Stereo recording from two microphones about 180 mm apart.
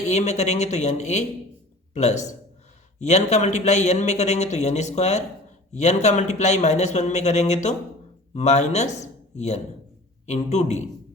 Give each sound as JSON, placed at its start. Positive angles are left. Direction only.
{"t": 0.1, "sound": "a man's voice", "side_deg": 40}